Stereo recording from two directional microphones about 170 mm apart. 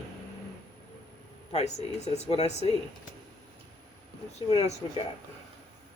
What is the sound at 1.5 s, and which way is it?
Speech, 40° left (ahead or behind).